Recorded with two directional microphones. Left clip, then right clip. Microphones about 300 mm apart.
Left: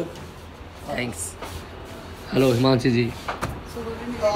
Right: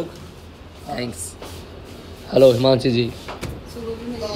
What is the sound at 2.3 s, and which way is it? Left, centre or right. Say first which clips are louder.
Speech: right 7 dB; centre.